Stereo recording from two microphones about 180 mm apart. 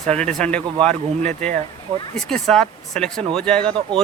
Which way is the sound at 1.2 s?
40° right (ahead or behind).